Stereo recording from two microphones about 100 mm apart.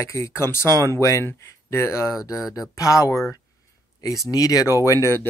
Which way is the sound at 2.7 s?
35° left (ahead or behind).